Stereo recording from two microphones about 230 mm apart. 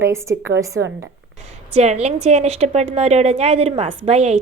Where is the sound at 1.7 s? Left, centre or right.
Right.